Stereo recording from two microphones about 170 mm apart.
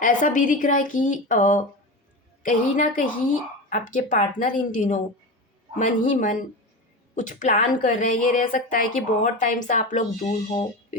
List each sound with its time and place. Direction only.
0.0 s a woman's voice: 50° left (ahead or behind)